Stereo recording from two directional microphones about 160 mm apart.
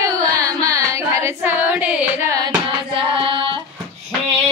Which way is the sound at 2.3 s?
30° right (ahead or behind).